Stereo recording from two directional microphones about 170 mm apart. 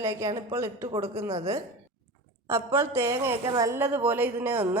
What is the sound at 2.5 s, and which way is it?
A woman's voice, 15° right (ahead or behind).